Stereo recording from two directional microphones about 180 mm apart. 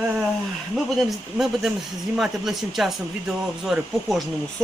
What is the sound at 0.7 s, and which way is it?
Speech, centre (ahead or behind).